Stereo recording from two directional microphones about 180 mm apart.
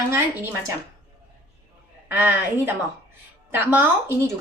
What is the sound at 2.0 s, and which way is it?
A woman's voice, 10° right (ahead or behind).